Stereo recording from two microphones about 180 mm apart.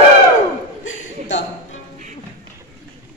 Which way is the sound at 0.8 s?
90° left.